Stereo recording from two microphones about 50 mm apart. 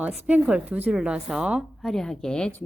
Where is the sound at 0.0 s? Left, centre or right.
Right.